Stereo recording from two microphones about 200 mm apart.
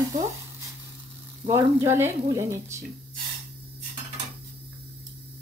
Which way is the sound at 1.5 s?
15° right (ahead or behind).